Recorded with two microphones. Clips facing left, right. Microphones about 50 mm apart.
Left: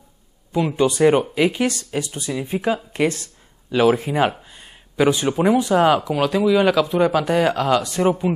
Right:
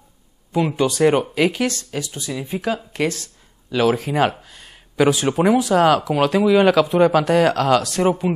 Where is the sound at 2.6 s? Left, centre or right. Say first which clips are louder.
Left 2 dB; left.